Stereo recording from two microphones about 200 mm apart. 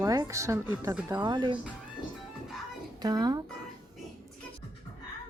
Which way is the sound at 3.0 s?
20° right (ahead or behind).